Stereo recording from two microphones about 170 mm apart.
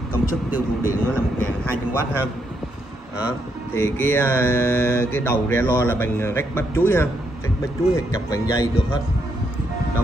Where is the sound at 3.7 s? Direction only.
15° left (ahead or behind).